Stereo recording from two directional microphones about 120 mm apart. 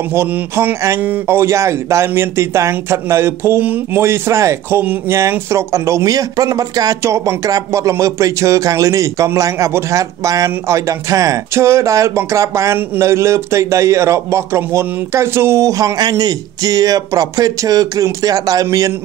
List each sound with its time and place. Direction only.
0.1 s speech: 20° right (ahead or behind)